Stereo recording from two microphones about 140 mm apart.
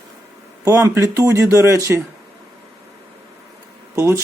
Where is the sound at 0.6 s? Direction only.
20° right (ahead or behind).